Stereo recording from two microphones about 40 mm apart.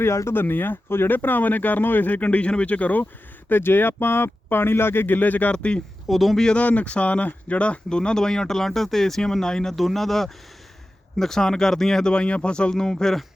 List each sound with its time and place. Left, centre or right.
0.0 s speech: left
1.1 s speech: left
3.5 s speech: left
6.1 s speech: centre
6.5 s speech: left; by 9.7 s centre
9.7 s speech: centre
12.1 s speech: left
12.7 s speech: centre